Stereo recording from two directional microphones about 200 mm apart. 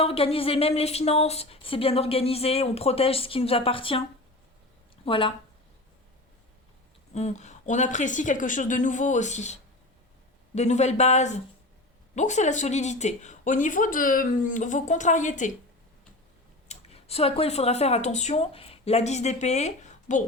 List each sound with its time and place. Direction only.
0.0 s speech: 30° left (ahead or behind)
5.0 s speech: 25° left (ahead or behind)
7.1 s a woman's voice: 35° left (ahead or behind)
16.6 s speech: 30° left (ahead or behind)